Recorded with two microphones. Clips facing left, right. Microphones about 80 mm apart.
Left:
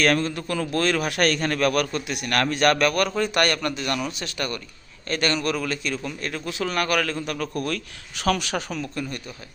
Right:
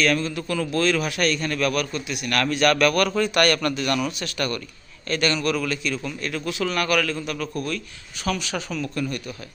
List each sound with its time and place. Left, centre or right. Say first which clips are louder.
0.0 s a man's voice: left 1 dB; left
0.3 s a man's voice: right 1 dB; left
2.0 s a man's voice: even; left
5.0 s a man's voice: right 1 dB; left
8.2 s speech: left 3 dB; left
8.8 s speech: right 3 dB; left